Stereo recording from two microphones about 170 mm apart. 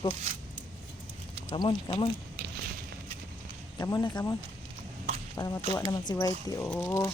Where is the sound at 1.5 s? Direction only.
30° left (ahead or behind).